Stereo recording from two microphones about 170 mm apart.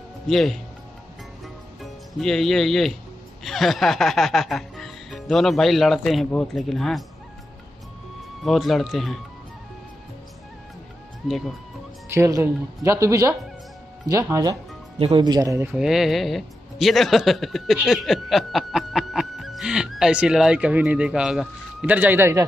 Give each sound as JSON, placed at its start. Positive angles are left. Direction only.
{"t": 0.3, "sound": "music", "side_deg": 0}
{"t": 1.8, "sound": "speech", "side_deg": 0}
{"t": 3.4, "sound": "music", "side_deg": 0}
{"t": 8.5, "sound": "music", "side_deg": 0}
{"t": 12.1, "sound": "speech", "side_deg": -20}
{"t": 15.7, "sound": "speech", "side_deg": 0}